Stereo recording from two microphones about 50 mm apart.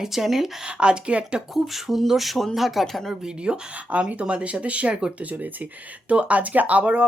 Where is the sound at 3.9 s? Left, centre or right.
Right.